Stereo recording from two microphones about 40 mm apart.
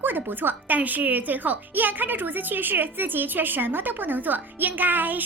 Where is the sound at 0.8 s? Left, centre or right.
Right.